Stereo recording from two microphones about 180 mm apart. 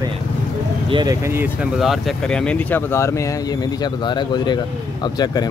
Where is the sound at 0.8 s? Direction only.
25° right (ahead or behind).